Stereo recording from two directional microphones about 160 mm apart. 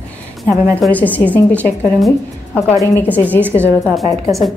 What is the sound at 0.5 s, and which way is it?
Speech, 10° left (ahead or behind).